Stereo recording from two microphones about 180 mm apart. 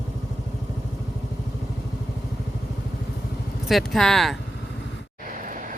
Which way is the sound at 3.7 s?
Centre (ahead or behind).